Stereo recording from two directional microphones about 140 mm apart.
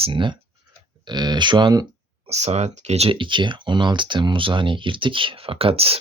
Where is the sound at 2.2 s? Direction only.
50° right (ahead or behind).